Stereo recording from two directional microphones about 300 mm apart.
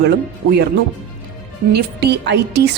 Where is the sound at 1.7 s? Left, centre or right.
Right.